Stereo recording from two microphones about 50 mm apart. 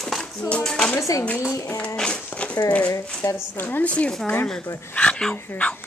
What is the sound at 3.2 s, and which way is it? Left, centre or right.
Speech, left.